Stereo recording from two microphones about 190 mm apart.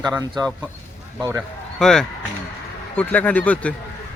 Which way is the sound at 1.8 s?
Centre (ahead or behind).